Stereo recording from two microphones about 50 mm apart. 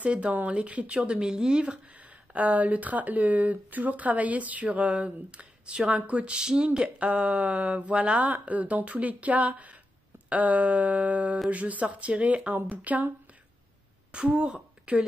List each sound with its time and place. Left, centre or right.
0.0 s speech: right
6.3 s speech: centre
10.3 s a sound: right
11.5 s speech: right
12.6 s a sound: right
14.1 s a woman's voice: right